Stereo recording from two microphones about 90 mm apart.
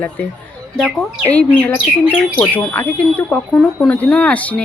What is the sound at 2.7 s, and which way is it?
Speech, 20° left (ahead or behind).